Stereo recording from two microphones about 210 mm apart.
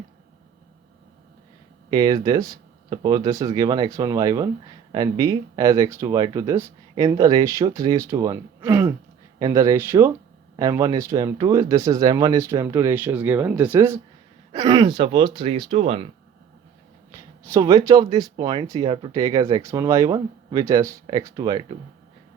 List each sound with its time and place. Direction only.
1.9 s speech: 20° right (ahead or behind)
14.8 s speech: 25° right (ahead or behind)
17.1 s speech: 15° right (ahead or behind)